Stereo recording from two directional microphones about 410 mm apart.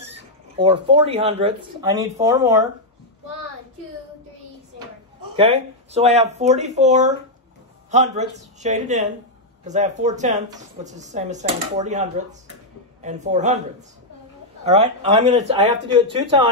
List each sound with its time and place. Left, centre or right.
0.0 s speech: centre
5.3 s speech: centre
14.6 s speech: centre